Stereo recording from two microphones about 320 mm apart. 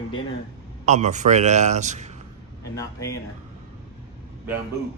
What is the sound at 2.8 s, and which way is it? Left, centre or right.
Speech, centre.